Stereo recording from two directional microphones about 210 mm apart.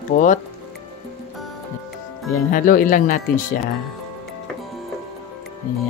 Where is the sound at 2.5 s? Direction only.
40° left (ahead or behind).